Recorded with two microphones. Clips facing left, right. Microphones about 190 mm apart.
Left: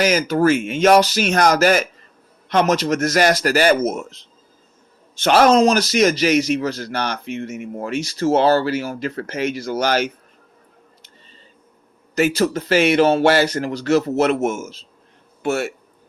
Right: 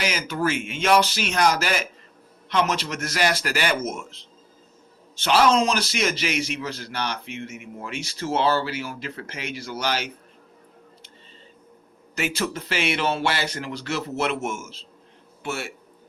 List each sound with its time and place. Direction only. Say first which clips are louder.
0.0 s a man's voice: left 9 dB; 45° left (ahead or behind)
5.2 s a man's voice: left 6 dB; 50° left (ahead or behind)
12.1 s a man's voice: left 9 dB; 40° left (ahead or behind)